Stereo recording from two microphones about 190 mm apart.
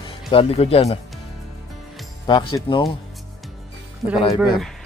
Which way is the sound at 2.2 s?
25° left (ahead or behind).